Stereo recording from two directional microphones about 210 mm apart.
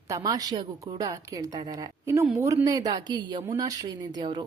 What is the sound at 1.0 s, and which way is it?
Speech, 15° right (ahead or behind).